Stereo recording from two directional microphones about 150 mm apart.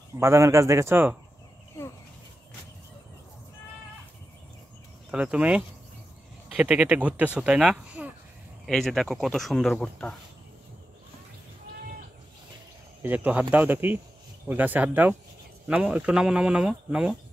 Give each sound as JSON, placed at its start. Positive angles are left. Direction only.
{"t": 0.2, "sound": "speech", "side_deg": -20}
{"t": 1.8, "sound": "a sound", "side_deg": 20}
{"t": 5.1, "sound": "speech", "side_deg": -10}
{"t": 13.0, "sound": "speech", "side_deg": -10}